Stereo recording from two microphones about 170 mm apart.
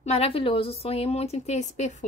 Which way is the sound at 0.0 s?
35° left (ahead or behind).